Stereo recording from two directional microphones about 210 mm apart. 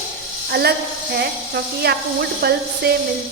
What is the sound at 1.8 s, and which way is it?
Speech, 50° right (ahead or behind).